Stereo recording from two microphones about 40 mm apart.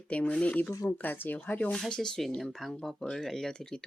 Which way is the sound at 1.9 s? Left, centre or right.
Centre.